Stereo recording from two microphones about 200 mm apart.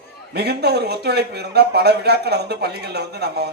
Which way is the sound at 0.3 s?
55° right (ahead or behind).